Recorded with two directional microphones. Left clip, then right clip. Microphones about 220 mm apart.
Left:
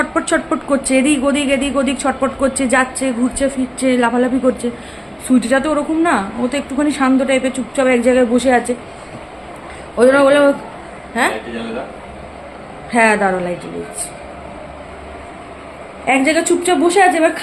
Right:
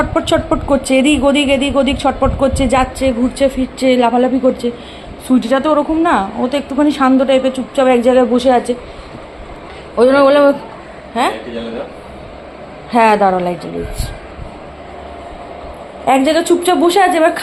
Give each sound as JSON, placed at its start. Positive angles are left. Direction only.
{"t": 0.1, "sound": "a woman's voice", "side_deg": 0}
{"t": 5.3, "sound": "a woman's voice", "side_deg": 0}
{"t": 10.0, "sound": "a woman's voice", "side_deg": 0}
{"t": 12.9, "sound": "a woman's voice", "side_deg": -10}
{"t": 16.0, "sound": "a woman's voice", "side_deg": -10}